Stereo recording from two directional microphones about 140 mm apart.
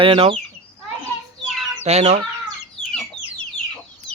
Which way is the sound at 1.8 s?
50° right (ahead or behind).